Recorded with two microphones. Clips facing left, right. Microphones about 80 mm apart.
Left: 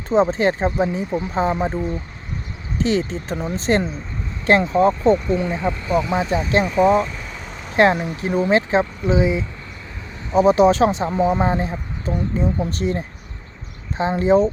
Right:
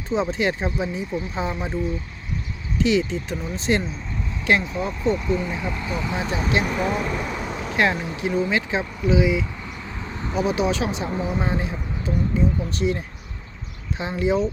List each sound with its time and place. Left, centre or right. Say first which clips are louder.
0.1 s speech: left 6 dB; left
7.1 s vehicle: right 6 dB; right
7.4 s vehicle: right 6 dB; centre
7.8 s speech: left 6 dB; left
14.0 s speech: left 6 dB; left